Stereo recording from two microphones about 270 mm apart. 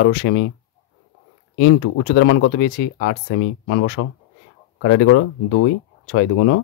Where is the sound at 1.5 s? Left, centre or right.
Left.